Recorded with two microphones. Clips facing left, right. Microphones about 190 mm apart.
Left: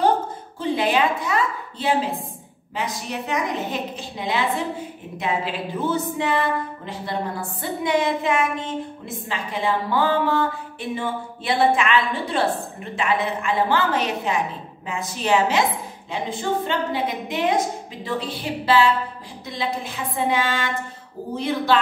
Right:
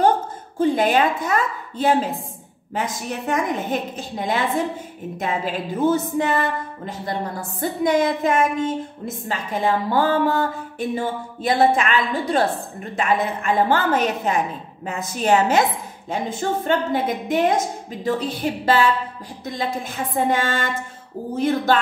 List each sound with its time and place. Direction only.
0.6 s a woman's voice: 45° right (ahead or behind)